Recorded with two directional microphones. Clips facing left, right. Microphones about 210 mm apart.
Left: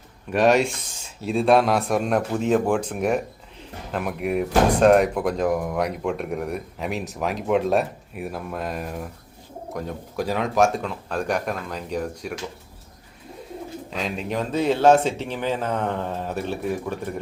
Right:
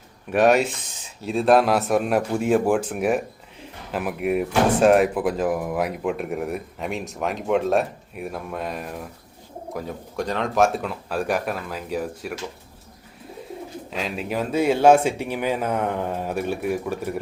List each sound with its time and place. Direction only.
0.3 s speech: 5° right (ahead or behind)
13.9 s speech: 5° right (ahead or behind)